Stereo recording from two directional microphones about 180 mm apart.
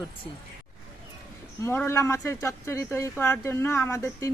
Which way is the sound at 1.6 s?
15° left (ahead or behind).